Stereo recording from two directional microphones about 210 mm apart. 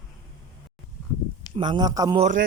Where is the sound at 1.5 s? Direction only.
20° right (ahead or behind).